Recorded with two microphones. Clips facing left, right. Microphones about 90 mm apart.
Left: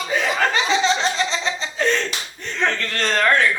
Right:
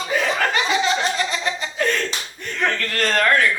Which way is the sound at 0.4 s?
25° left (ahead or behind).